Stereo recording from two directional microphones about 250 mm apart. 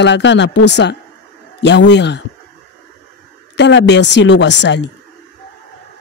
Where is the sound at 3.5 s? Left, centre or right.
Left.